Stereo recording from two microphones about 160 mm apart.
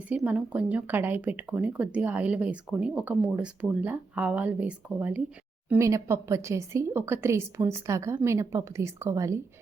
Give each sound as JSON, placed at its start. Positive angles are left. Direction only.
{"t": 0.3, "sound": "speech", "side_deg": -10}